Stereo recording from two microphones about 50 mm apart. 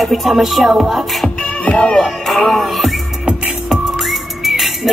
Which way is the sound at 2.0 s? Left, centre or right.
Centre.